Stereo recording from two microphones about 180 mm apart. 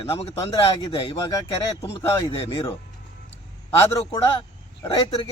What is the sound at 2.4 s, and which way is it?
Speech, 30° left (ahead or behind).